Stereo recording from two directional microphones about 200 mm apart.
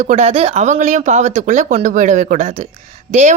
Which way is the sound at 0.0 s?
35° right (ahead or behind).